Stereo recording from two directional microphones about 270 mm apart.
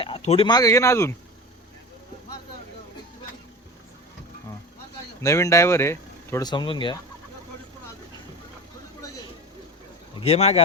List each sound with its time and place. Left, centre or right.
0.0 s speech: centre
5.2 s speech: centre
10.2 s speech: left